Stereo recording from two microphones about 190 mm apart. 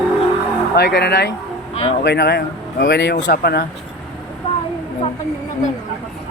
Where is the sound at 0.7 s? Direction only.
60° left (ahead or behind).